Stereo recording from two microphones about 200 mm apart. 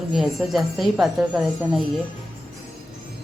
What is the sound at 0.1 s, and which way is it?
Speech, centre (ahead or behind).